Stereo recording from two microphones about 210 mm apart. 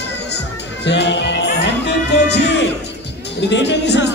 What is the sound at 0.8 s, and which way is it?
Music, 55° left (ahead or behind).